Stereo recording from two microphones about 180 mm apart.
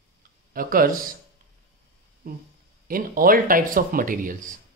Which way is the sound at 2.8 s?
50° right (ahead or behind).